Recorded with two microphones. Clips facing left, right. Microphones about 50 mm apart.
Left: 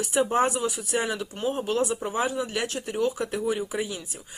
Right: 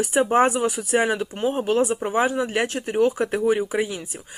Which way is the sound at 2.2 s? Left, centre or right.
Right.